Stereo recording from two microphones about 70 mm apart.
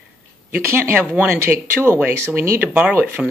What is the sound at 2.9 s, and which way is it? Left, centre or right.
Speech, right.